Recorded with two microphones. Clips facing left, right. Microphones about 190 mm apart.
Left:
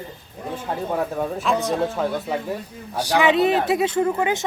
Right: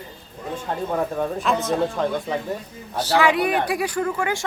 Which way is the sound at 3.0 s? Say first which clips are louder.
Left 1 dB; 15° left (ahead or behind).